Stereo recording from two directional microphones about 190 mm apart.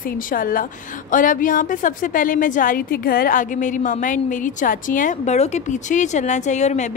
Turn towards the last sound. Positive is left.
turn(degrees=40)  # may be behind; listen again after turning